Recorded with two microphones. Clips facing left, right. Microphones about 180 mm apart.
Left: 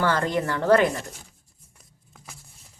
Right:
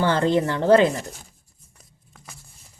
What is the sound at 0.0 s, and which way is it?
Speech, 25° right (ahead or behind).